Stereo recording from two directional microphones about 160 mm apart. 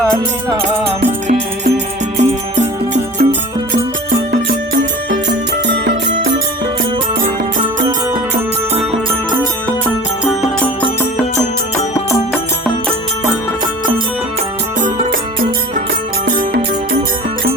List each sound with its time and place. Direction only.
1.0 s music: 45° right (ahead or behind)
4.1 s music: 90° right